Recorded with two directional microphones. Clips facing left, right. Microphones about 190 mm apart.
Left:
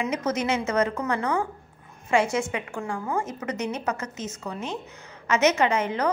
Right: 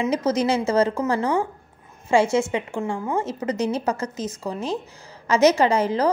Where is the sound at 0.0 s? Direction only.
30° right (ahead or behind).